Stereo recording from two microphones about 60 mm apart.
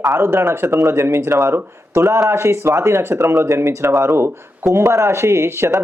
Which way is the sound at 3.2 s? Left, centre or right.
Right.